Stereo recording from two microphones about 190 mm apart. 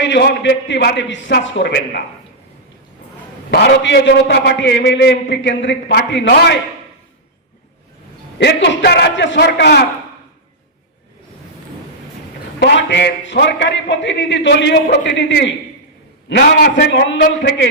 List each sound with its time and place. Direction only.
0.0 s a man's voice: 65° left (ahead or behind)
3.5 s a man's voice: 60° left (ahead or behind)
8.4 s a man's voice: 65° left (ahead or behind)
12.5 s a man's voice: 65° left (ahead or behind)